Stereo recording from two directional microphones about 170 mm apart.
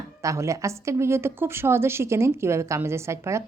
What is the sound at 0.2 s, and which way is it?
A woman's voice, 20° right (ahead or behind).